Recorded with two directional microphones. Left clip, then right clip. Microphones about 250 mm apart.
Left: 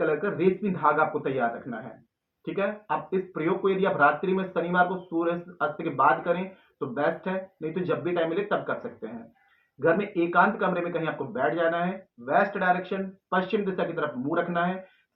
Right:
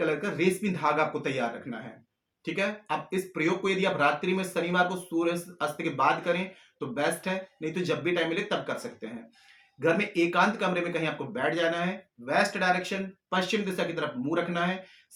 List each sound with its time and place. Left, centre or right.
0.0 s speech: right
9.8 s speech: right